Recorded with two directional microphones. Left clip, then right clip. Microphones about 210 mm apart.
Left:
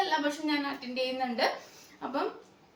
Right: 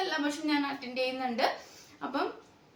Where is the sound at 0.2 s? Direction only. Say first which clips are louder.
Even; 15° right (ahead or behind).